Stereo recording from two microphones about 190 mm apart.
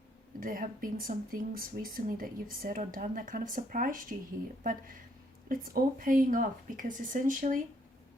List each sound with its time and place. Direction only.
0.3 s speech: 45° right (ahead or behind)